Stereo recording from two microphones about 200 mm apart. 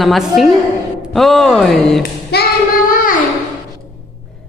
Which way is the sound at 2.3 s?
50° left (ahead or behind).